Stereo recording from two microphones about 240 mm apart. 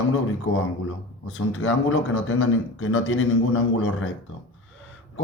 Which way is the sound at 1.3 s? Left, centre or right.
Left.